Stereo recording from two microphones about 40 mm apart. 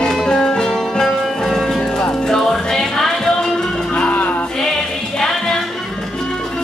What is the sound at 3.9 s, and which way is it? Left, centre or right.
Music, left.